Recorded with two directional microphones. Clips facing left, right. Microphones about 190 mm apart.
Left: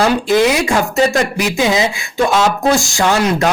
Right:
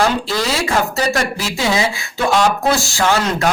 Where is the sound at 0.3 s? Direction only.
20° left (ahead or behind).